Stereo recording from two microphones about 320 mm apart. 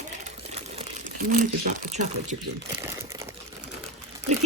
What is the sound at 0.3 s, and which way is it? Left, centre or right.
Crumpling, right.